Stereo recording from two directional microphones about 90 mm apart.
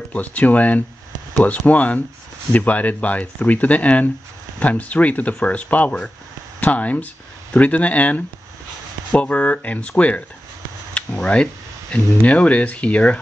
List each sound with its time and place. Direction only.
0.1 s speech: 15° left (ahead or behind)